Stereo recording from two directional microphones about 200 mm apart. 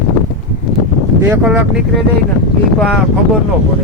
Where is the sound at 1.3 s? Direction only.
10° right (ahead or behind).